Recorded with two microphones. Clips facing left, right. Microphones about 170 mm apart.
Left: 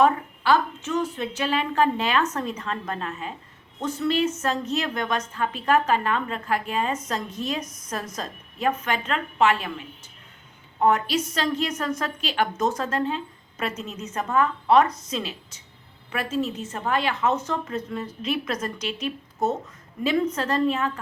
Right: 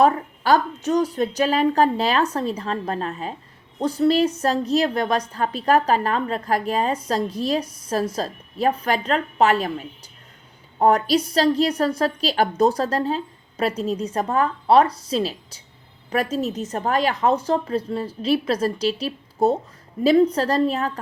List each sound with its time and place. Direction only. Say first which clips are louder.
0.0 s a woman's voice: right 2 dB; 40° right (ahead or behind)